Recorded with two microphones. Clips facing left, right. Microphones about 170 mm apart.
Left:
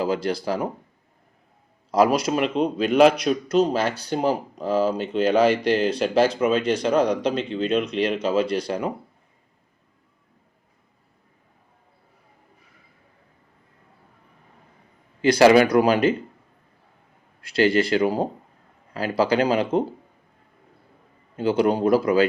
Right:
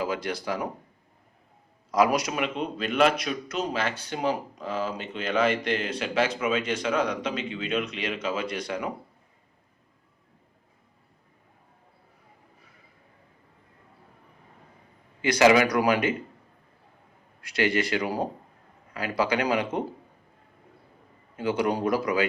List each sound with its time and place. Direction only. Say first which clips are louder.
0.0 s a man's voice: left 6 dB; 30° left (ahead or behind)
1.9 s a man's voice: left 4 dB; 30° left (ahead or behind)
15.2 s a man's voice: left 5 dB; 30° left (ahead or behind)
17.4 s a man's voice: left 6 dB; 30° left (ahead or behind)
21.3 s a man's voice: left 6 dB; 30° left (ahead or behind)